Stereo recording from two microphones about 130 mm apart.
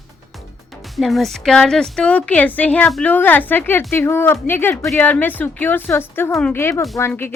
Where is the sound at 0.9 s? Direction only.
Centre (ahead or behind).